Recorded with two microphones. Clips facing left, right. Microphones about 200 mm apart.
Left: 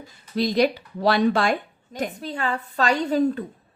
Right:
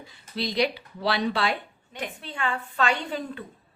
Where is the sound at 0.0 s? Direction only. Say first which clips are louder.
Left 7 dB; 45° left (ahead or behind).